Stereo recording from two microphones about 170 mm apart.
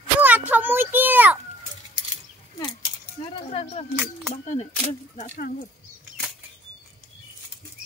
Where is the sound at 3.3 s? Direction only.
35° left (ahead or behind).